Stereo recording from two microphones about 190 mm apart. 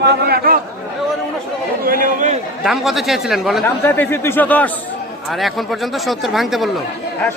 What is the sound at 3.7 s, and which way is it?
Speech, 10° left (ahead or behind).